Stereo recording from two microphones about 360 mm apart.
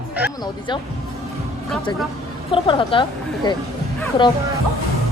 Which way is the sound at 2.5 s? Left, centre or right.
Centre.